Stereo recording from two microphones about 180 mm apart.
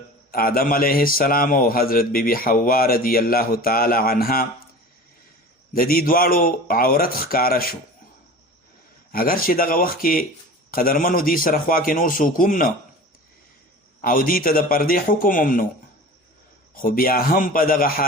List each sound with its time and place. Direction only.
0.3 s a man's voice: 55° left (ahead or behind)
5.7 s speech: 55° left (ahead or behind)
9.1 s speech: 55° left (ahead or behind)
14.0 s speech: 50° left (ahead or behind)
16.7 s speech: 50° left (ahead or behind)